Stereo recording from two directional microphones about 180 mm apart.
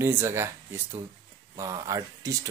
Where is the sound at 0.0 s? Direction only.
15° right (ahead or behind).